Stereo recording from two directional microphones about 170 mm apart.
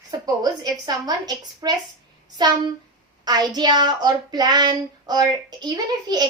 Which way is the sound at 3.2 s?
25° right (ahead or behind).